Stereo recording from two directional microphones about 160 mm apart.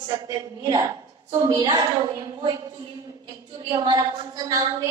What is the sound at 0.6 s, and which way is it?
A woman's voice, 25° right (ahead or behind).